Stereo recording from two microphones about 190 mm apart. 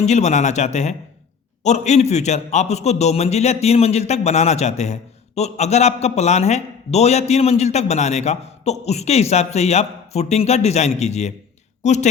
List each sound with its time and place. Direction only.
0.0 s a man's voice: 35° left (ahead or behind)